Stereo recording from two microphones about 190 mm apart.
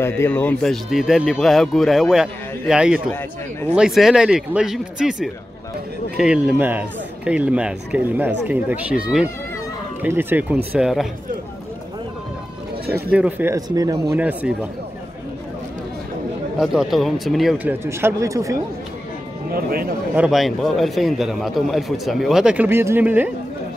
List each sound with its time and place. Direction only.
0.0 s a man's voice: 10° left (ahead or behind)
12.9 s speech: 10° right (ahead or behind)
14.1 s speech: 10° right (ahead or behind)
16.5 s a man's voice: 5° right (ahead or behind)
17.8 s speech: 15° right (ahead or behind)
19.5 s speech: 50° right (ahead or behind)
20.2 s a man's voice: centre (ahead or behind)